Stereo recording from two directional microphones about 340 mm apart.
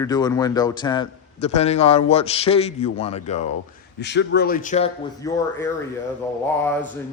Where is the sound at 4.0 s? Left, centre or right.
Left.